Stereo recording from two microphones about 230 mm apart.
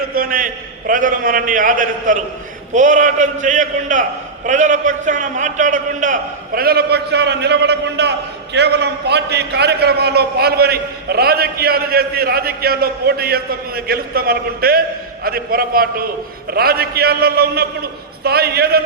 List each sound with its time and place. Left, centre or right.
0.1 s a man's voice: right